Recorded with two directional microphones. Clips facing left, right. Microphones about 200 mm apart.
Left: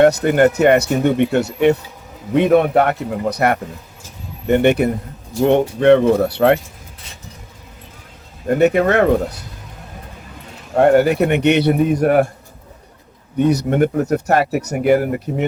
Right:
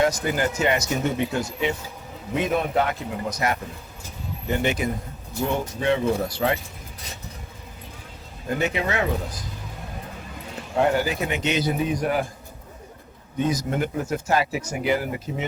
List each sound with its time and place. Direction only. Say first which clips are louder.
0.0 s speech: left 10 dB; 65° left (ahead or behind)
8.4 s speech: left 11 dB; 60° left (ahead or behind)
10.8 s speech: left 10 dB; 60° left (ahead or behind)
13.4 s speech: left 9 dB; 65° left (ahead or behind)